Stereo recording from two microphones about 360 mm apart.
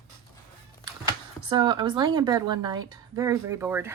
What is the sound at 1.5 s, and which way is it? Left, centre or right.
A woman's voice, centre.